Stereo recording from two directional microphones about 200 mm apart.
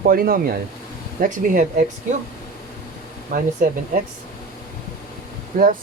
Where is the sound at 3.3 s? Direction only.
45° right (ahead or behind).